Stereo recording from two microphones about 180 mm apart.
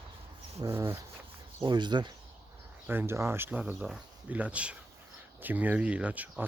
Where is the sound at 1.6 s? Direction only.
25° right (ahead or behind).